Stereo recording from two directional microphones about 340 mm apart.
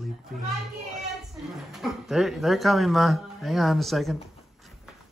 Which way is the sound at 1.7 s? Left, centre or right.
Centre.